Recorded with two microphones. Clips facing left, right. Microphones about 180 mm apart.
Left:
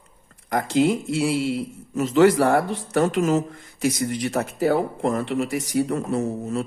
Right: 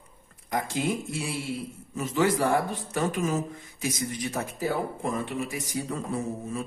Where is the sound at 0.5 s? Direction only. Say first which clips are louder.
Left 8 dB; 70° left (ahead or behind).